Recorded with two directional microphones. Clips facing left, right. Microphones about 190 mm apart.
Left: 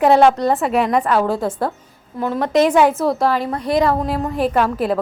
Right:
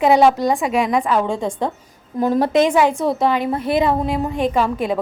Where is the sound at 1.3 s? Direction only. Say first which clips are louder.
Left 1 dB; 5° left (ahead or behind).